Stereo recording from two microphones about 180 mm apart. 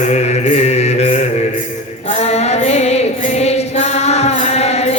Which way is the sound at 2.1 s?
35° left (ahead or behind).